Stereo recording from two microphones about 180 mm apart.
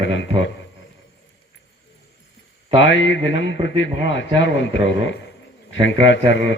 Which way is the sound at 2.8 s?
90° left.